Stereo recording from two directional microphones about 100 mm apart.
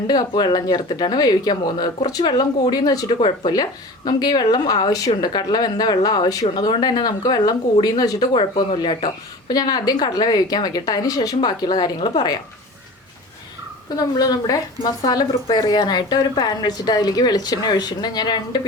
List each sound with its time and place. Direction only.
0.1 s a woman's voice: 45° left (ahead or behind)
3.2 s speech: 55° left (ahead or behind)
3.5 s a woman's voice: 40° left (ahead or behind)
8.3 s speech: 55° left (ahead or behind)
9.5 s a woman's voice: 45° left (ahead or behind)
13.9 s a woman's voice: 40° left (ahead or behind)